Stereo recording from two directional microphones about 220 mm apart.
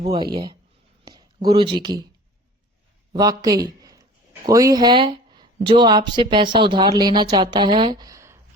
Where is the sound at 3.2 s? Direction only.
15° right (ahead or behind).